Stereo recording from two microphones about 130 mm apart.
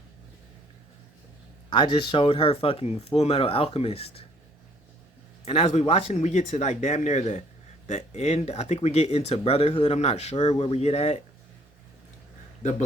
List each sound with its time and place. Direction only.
1.7 s speech: 35° left (ahead or behind)
5.5 s speech: 55° left (ahead or behind)